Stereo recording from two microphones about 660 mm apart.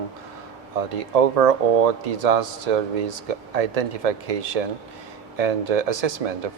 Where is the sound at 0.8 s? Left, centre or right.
Right.